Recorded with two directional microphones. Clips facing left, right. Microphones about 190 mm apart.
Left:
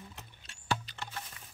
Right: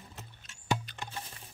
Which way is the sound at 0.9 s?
15° right (ahead or behind).